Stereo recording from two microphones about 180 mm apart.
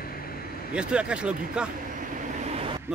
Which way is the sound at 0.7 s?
5° right (ahead or behind).